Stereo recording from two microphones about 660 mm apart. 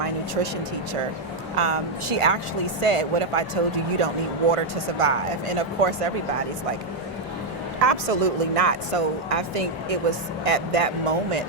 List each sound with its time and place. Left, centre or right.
1.5 s speech: right
7.8 s speech: right